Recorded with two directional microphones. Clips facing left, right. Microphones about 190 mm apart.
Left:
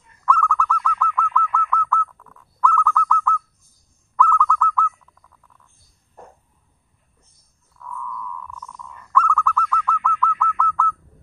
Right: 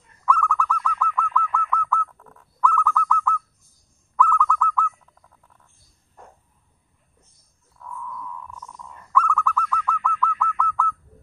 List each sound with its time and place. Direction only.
0.2 s owl: 5° right (ahead or behind)
2.6 s bird: 5° right (ahead or behind)
4.2 s owl: 5° right (ahead or behind)
7.8 s a sound: 30° right (ahead or behind)
9.1 s bird: 5° right (ahead or behind)